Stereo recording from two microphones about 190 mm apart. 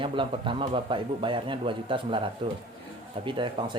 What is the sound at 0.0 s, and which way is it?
Speech, 25° right (ahead or behind).